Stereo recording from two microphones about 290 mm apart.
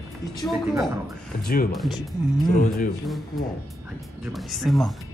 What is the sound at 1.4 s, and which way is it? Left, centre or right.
Speech, left.